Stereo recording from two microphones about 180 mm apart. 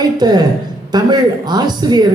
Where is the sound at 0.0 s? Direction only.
25° right (ahead or behind).